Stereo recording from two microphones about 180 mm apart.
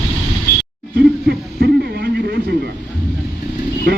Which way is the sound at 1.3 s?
65° right (ahead or behind).